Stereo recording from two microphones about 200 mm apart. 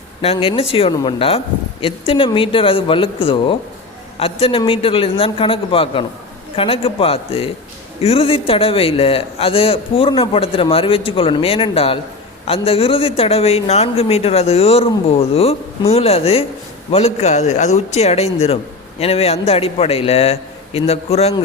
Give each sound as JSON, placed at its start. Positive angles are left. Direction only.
{"t": 0.2, "sound": "a man's voice", "side_deg": 30}